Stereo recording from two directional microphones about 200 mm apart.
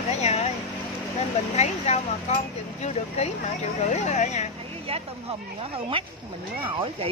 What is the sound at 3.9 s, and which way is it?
Speech, 35° left (ahead or behind).